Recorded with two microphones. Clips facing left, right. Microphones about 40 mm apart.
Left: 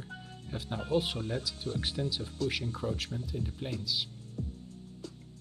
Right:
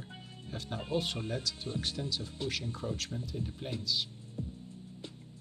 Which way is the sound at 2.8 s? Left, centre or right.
Centre.